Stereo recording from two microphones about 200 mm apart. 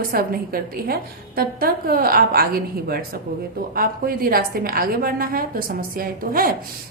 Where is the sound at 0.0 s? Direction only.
45° right (ahead or behind).